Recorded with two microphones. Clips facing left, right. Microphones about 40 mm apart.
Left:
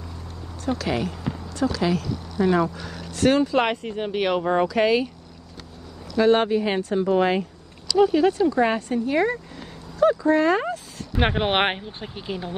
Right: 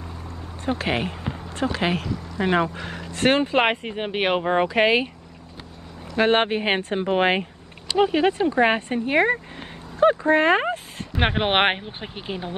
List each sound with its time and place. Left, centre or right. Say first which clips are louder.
0.7 s speech: right 1 dB; right
6.1 s speech: left 1 dB; right
11.1 s speech: right 1 dB; right